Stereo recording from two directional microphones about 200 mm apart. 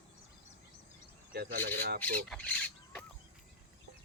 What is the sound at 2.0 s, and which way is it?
Speech, 5° left (ahead or behind).